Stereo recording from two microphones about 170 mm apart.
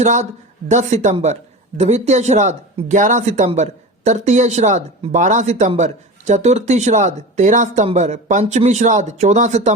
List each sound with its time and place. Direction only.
0.0 s speech: 45° right (ahead or behind)